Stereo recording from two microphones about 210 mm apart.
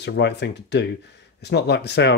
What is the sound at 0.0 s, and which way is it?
Speech, 55° left (ahead or behind).